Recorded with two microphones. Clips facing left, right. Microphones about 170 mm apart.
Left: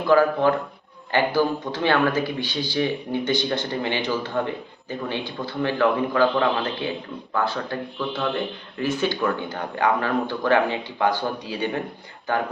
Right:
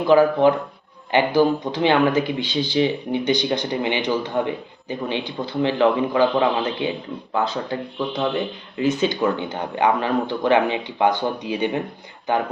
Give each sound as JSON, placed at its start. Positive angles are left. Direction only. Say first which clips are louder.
{"t": 0.0, "sound": "speech", "louder": "right 3 dB", "side_deg": -20}